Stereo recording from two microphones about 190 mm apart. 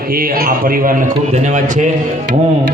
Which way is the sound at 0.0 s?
50° right (ahead or behind).